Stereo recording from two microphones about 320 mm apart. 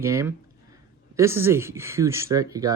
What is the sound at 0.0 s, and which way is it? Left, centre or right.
Speech, centre.